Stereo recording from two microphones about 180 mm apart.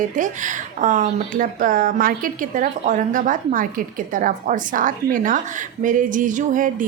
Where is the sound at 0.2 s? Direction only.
45° right (ahead or behind).